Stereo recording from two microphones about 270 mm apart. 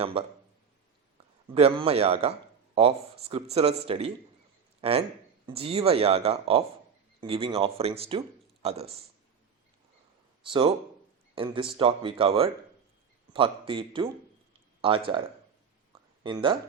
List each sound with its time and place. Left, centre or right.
0.0 s speech: right
1.5 s a man's voice: right
11.3 s speech: centre
16.2 s speech: centre